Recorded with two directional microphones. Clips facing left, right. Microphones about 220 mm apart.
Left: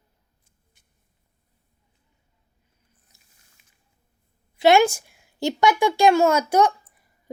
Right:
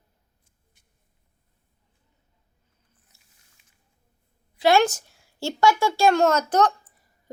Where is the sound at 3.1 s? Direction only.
15° left (ahead or behind).